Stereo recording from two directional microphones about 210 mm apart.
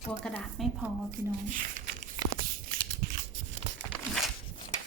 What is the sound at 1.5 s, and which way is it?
Speech, 40° right (ahead or behind).